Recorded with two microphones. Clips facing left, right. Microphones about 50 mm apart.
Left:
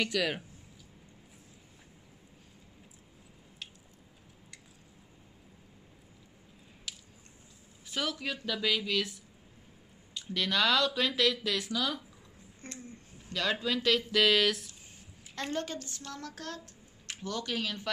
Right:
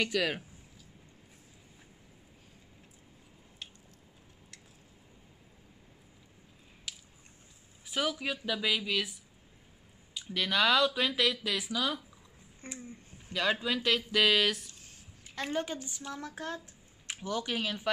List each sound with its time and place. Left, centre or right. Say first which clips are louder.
0.0 s speech: even; centre
6.9 s a sound: even; centre
7.8 s speech: right 2 dB; centre